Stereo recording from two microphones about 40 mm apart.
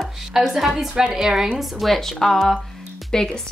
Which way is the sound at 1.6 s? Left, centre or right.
Centre.